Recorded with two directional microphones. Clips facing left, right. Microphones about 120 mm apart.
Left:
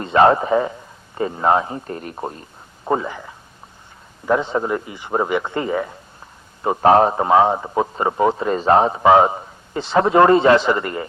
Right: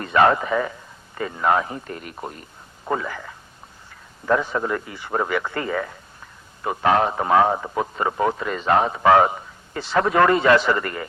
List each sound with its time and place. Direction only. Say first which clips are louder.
0.0 s a man's voice: left 3 dB; 30° left (ahead or behind)
6.6 s a man's voice: left 6 dB; 30° left (ahead or behind)